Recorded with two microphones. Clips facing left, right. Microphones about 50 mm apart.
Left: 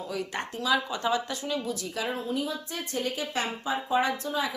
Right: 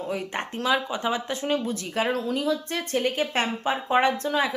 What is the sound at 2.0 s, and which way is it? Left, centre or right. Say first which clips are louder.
Speech: right 5 dB; right.